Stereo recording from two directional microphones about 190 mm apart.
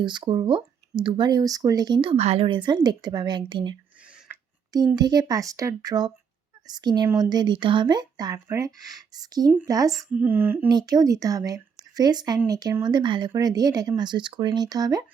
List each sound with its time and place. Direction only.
0.0 s speech: 25° right (ahead or behind)
4.3 s a sound: 20° right (ahead or behind)
4.9 s speech: 20° right (ahead or behind)
10.7 s speech: 20° right (ahead or behind)